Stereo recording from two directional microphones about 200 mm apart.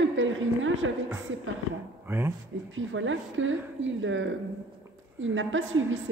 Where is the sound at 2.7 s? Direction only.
70° right (ahead or behind).